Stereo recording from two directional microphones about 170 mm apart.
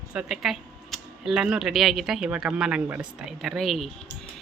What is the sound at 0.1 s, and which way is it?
Speech, 5° right (ahead or behind).